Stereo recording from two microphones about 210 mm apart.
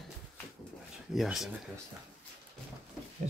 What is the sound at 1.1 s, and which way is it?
Speech, centre (ahead or behind).